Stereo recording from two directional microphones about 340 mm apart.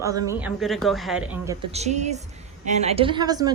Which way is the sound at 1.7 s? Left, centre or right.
Centre.